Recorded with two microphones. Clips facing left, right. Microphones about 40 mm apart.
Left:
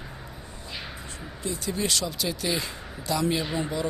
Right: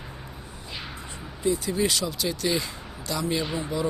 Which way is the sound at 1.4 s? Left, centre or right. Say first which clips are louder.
Right 5 dB; centre.